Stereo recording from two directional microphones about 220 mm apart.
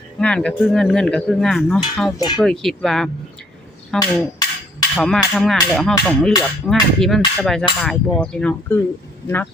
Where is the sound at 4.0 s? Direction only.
15° left (ahead or behind).